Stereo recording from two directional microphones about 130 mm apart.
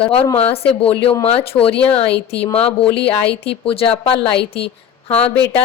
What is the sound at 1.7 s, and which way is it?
Speech, 10° left (ahead or behind).